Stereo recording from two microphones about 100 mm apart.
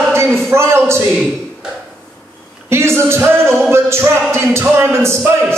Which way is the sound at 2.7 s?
25° right (ahead or behind).